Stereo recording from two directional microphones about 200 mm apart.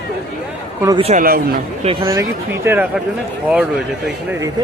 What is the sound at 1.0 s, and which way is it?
Speech, 40° right (ahead or behind).